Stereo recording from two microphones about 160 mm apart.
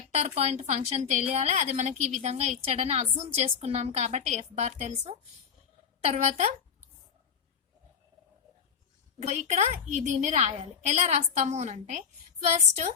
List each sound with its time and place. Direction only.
0.1 s a woman's voice: 40° right (ahead or behind)
9.2 s a woman's voice: 45° right (ahead or behind)